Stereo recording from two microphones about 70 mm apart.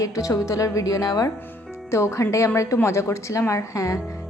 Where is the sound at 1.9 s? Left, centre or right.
Left.